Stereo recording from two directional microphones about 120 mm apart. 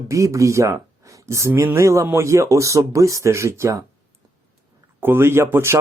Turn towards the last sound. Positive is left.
turn(degrees=-20)  # may be behind; listen again after turning